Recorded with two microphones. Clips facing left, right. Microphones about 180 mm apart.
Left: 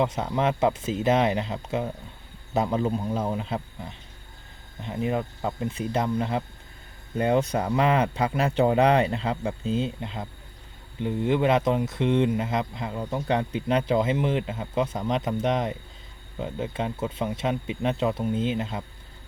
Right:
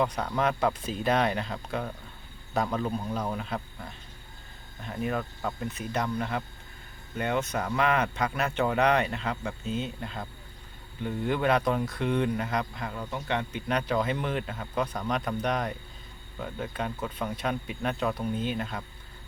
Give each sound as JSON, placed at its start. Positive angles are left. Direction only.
{"t": 0.0, "sound": "speech", "side_deg": 25}